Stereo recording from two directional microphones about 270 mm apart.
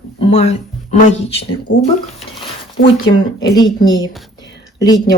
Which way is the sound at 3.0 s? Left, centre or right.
Centre.